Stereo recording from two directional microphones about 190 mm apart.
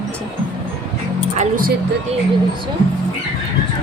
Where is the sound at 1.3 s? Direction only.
45° right (ahead or behind).